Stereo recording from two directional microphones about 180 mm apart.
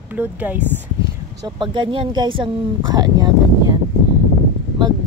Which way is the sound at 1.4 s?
25° right (ahead or behind).